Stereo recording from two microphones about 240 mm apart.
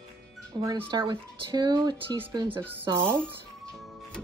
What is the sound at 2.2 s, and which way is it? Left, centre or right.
Speech, centre.